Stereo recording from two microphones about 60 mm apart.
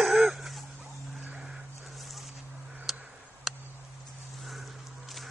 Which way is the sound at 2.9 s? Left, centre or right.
Centre.